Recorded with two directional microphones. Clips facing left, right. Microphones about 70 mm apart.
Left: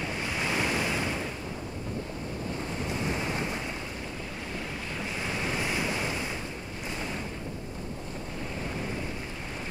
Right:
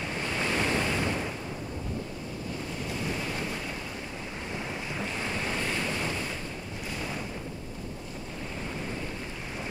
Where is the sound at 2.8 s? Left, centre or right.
Left.